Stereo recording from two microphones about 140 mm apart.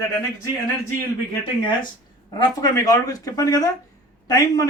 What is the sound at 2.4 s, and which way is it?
A man's voice, 25° left (ahead or behind).